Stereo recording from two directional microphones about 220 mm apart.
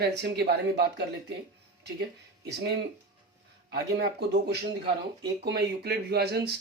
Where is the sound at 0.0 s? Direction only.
50° right (ahead or behind).